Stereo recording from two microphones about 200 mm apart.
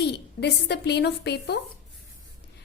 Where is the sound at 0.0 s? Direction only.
55° left (ahead or behind).